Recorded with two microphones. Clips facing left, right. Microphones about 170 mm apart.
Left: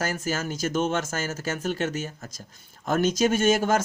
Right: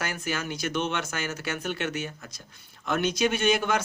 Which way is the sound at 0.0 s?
40° left (ahead or behind).